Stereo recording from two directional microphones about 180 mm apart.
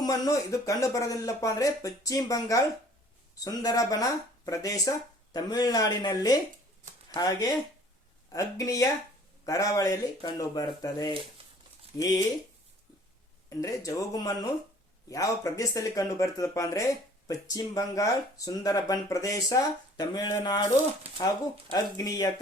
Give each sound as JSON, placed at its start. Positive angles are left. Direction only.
{"t": 0.0, "sound": "speech", "side_deg": 20}
{"t": 11.4, "sound": "crumpling", "side_deg": -30}
{"t": 11.9, "sound": "speech", "side_deg": 20}
{"t": 13.5, "sound": "speech", "side_deg": 20}